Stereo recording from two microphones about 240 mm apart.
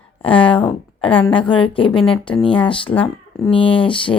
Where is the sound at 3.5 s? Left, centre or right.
Left.